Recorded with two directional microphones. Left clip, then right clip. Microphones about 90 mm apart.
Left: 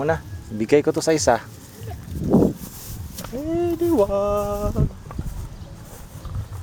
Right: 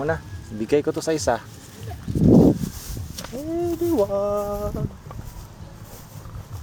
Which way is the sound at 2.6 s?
Centre (ahead or behind).